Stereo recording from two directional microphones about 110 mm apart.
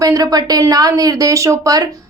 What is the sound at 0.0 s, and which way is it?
A woman's voice, 35° right (ahead or behind).